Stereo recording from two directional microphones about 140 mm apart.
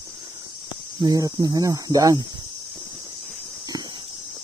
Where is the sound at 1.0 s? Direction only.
25° right (ahead or behind).